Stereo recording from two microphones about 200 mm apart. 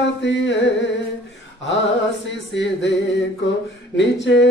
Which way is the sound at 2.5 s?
65° left (ahead or behind).